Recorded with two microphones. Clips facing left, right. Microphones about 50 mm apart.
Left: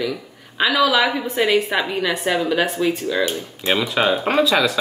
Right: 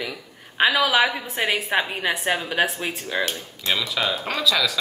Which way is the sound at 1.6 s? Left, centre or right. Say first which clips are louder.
Left 2 dB; right.